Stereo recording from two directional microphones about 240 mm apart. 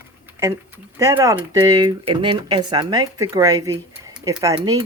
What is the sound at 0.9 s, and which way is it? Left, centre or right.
Speech, centre.